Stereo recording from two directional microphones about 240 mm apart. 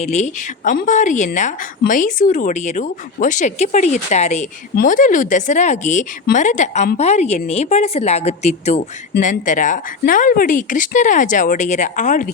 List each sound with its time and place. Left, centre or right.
0.0 s a woman's voice: left